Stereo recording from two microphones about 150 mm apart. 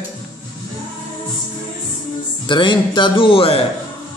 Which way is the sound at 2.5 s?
35° left (ahead or behind).